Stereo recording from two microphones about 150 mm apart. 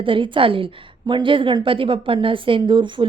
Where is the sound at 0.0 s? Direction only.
35° right (ahead or behind).